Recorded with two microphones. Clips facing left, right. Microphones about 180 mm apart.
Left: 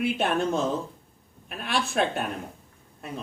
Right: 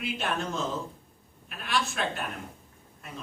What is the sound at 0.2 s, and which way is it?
Speech, 55° left (ahead or behind).